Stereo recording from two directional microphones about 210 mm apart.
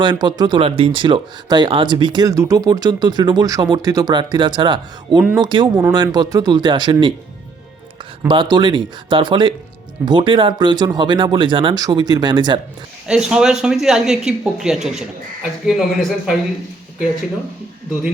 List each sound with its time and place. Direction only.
0.0 s speech: 20° right (ahead or behind)
8.3 s speech: 20° right (ahead or behind)
13.1 s speech: 5° right (ahead or behind)